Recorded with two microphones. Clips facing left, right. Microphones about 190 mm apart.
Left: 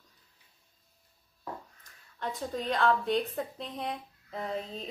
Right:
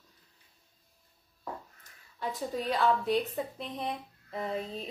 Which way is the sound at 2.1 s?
5° right (ahead or behind).